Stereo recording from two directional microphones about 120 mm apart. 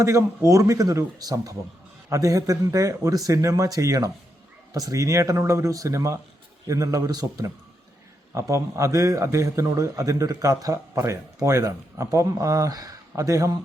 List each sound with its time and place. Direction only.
0.0 s a man's voice: 25° right (ahead or behind)